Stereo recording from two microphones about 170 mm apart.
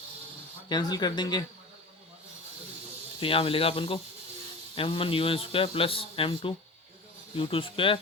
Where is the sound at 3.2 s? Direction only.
35° left (ahead or behind).